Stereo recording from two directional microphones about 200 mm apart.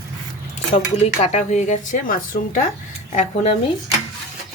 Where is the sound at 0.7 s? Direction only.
40° left (ahead or behind).